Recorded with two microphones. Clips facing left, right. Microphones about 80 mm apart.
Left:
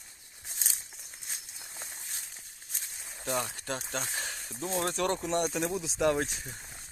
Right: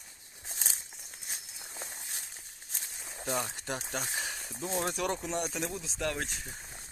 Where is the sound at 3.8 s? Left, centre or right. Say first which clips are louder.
Even; centre.